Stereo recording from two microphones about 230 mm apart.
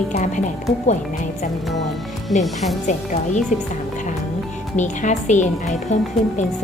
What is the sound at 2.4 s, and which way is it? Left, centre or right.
Speech, centre.